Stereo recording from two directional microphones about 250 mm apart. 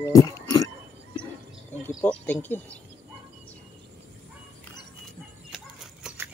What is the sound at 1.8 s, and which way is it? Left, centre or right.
Speech, centre.